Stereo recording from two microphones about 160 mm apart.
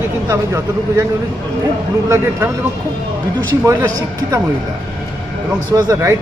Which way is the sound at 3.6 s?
20° right (ahead or behind).